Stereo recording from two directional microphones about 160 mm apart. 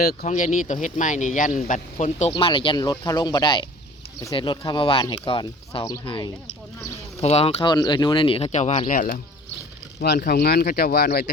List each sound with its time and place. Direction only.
0.3 s speech: 50° left (ahead or behind)
2.3 s speech: 30° left (ahead or behind)
7.2 s speech: 40° left (ahead or behind)
8.5 s speech: 45° left (ahead or behind)
8.9 s speech: 60° left (ahead or behind)
10.0 s speech: 70° left (ahead or behind)